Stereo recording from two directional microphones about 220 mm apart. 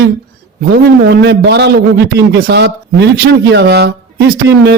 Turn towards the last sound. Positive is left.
turn(degrees=-50)  # may be behind; listen again after turning